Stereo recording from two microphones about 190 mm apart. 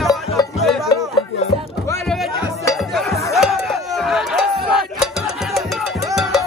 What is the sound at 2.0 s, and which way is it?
Music, centre (ahead or behind).